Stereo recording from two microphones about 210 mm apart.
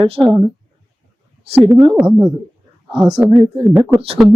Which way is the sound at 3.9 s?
25° right (ahead or behind).